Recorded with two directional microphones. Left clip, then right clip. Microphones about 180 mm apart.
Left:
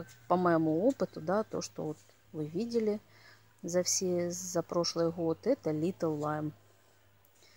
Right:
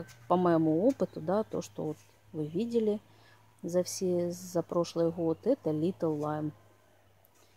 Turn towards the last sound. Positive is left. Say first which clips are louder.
# right 1 dB
turn(degrees=5)  # may be behind; listen again after turning